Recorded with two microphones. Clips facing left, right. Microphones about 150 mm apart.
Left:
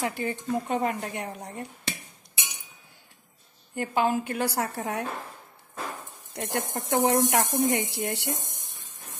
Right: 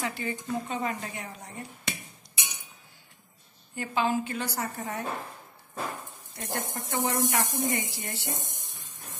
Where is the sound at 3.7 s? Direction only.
50° left (ahead or behind); by 5.0 s 70° left (ahead or behind).